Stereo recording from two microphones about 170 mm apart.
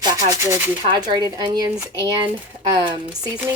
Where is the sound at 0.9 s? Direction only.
25° right (ahead or behind).